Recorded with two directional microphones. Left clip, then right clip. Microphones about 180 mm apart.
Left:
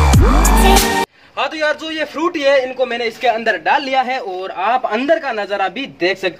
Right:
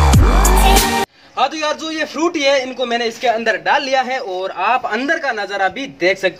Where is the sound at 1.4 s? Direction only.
10° left (ahead or behind).